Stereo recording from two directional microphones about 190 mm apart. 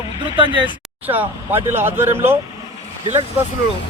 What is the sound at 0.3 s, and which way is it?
Speech, 25° right (ahead or behind).